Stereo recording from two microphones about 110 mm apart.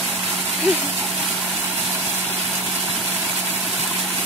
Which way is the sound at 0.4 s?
Centre (ahead or behind).